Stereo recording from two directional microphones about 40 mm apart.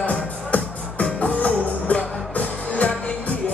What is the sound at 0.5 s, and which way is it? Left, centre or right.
Music, left.